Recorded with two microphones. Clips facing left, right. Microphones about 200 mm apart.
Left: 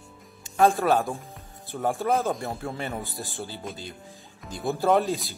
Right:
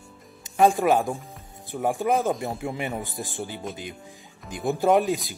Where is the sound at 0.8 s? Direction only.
15° right (ahead or behind).